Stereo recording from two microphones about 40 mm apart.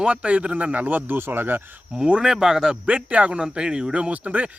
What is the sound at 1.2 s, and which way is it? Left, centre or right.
Speech, right.